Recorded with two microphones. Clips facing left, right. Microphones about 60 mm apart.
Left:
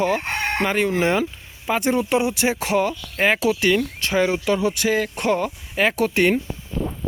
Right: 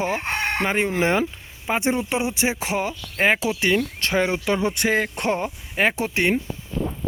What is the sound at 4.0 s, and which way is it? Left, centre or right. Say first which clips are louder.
Speech: left 2 dB; right.